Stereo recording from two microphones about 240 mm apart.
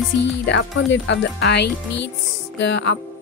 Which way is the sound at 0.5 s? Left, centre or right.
Left.